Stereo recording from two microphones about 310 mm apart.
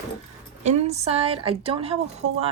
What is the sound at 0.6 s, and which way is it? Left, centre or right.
A woman's voice, right.